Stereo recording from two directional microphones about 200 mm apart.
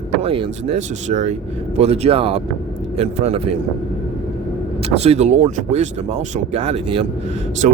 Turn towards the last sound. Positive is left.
turn(degrees=-35)  # may be behind; listen again after turning